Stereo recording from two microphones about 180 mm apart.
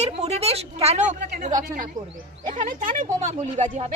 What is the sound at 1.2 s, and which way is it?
Speech, 55° right (ahead or behind).